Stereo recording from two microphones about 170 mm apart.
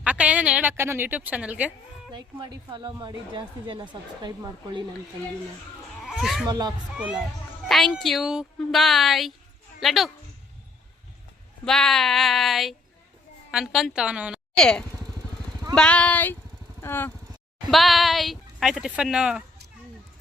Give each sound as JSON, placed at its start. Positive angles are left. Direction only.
{"t": 0.0, "sound": "a woman's voice", "side_deg": -10}
{"t": 2.1, "sound": "speech", "side_deg": -30}
{"t": 6.0, "sound": "a sound", "side_deg": 0}
{"t": 6.4, "sound": "speech", "side_deg": -25}
{"t": 6.9, "sound": "a woman's voice", "side_deg": -5}
{"t": 11.6, "sound": "speech", "side_deg": 5}
{"t": 17.7, "sound": "speech", "side_deg": 0}